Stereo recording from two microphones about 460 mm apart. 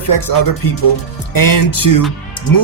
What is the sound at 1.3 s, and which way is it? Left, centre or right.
Speech, left.